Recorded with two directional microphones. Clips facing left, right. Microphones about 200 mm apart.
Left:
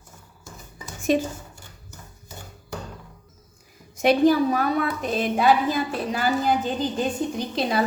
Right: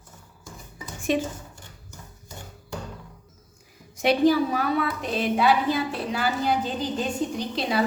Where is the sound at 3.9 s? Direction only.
50° left (ahead or behind).